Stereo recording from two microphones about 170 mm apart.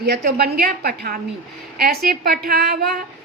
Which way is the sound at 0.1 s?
65° right (ahead or behind).